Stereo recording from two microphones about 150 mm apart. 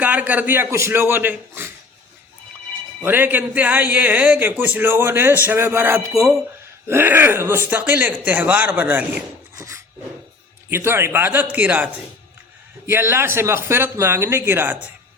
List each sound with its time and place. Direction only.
0.0 s speech: 10° right (ahead or behind)
3.0 s speech: 10° right (ahead or behind)
12.9 s speech: 15° right (ahead or behind)